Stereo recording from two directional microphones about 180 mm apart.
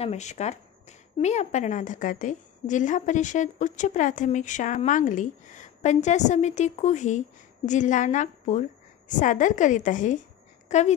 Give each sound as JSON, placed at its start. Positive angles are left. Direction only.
{"t": 0.0, "sound": "a woman's voice", "side_deg": 40}